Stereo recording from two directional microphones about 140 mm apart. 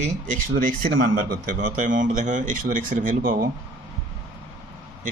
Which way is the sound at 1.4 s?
70° right (ahead or behind).